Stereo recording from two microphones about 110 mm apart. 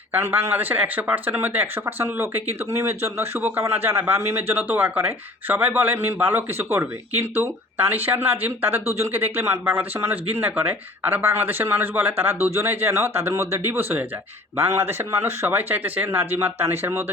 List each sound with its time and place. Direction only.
0.1 s speech: 20° right (ahead or behind)